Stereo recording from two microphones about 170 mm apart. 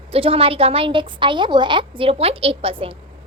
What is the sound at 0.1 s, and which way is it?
A woman's voice, 35° right (ahead or behind).